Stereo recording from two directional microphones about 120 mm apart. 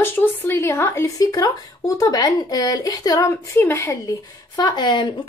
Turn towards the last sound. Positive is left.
turn(degrees=40)  # may be behind; listen again after turning